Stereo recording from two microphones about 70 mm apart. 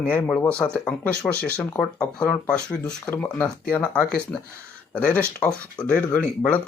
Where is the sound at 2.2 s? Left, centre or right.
Centre.